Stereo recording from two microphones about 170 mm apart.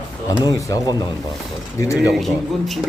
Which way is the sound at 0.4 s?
25° left (ahead or behind).